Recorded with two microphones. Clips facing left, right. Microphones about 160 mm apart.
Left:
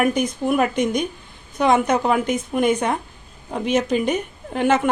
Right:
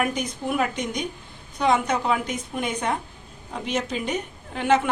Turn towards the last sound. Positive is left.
turn(degrees=50)  # may be behind; listen again after turning